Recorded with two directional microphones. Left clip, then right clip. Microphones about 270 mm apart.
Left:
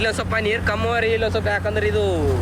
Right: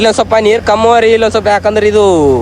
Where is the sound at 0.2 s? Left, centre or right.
Centre.